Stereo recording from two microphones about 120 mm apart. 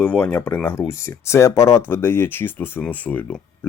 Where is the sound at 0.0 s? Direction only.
15° left (ahead or behind).